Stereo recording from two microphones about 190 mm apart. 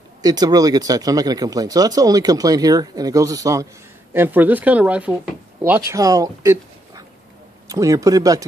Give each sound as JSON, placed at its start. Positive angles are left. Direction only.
{"t": 0.2, "sound": "speech", "side_deg": -20}